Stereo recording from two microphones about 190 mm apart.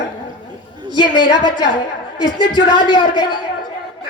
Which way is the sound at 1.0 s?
25° left (ahead or behind).